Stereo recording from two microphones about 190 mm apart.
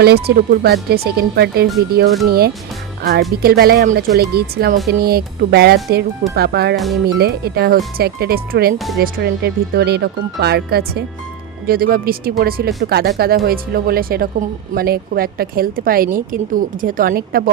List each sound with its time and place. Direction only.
0.0 s speech: 55° right (ahead or behind)
3.0 s a woman's voice: 55° right (ahead or behind)
6.7 s speech: centre (ahead or behind)
7.2 s a woman's voice: 55° right (ahead or behind)